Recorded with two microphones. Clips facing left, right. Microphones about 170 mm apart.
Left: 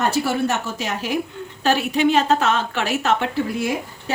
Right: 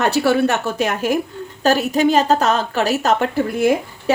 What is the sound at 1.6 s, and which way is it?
A woman's voice, 40° right (ahead or behind).